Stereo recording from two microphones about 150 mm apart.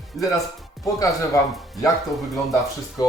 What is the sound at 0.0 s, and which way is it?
Music, centre (ahead or behind).